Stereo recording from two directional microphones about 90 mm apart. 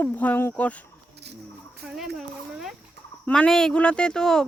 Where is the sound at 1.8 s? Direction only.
5° right (ahead or behind).